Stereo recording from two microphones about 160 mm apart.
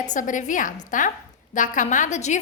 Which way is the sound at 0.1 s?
55° left (ahead or behind).